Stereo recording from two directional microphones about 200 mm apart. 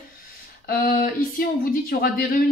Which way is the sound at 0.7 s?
45° left (ahead or behind).